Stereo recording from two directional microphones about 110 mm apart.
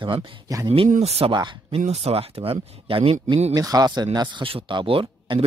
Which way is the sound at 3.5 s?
35° right (ahead or behind).